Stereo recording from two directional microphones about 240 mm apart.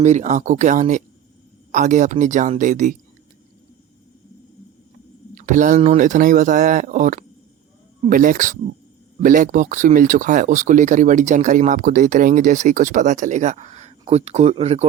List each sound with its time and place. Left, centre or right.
0.0 s speech: right
5.3 s speech: right